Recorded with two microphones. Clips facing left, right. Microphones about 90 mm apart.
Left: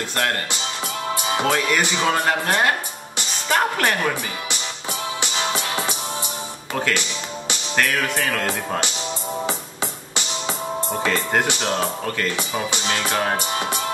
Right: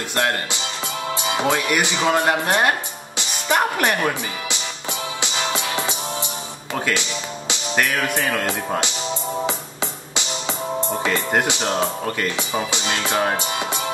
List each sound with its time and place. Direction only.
0.1 s speech: 20° right (ahead or behind)
6.7 s speech: 15° right (ahead or behind)
11.0 s speech: 15° right (ahead or behind)